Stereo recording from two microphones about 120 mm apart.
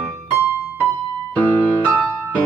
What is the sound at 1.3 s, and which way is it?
Music, 15° left (ahead or behind).